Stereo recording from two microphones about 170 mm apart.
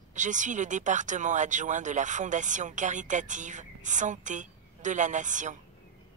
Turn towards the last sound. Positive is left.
turn(degrees=-45)  # may be behind; listen again after turning